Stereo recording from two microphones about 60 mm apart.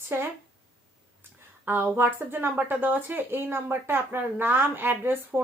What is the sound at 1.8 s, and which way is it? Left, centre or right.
Speech, right.